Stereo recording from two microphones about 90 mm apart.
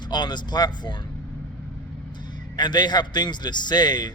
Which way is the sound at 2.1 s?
55° left (ahead or behind).